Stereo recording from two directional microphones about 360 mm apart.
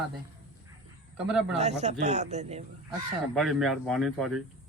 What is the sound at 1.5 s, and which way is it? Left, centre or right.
Speech, centre.